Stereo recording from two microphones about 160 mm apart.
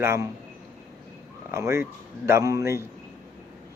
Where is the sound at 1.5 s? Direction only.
15° right (ahead or behind).